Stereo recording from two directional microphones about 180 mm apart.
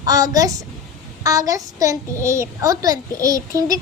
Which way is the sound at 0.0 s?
20° right (ahead or behind).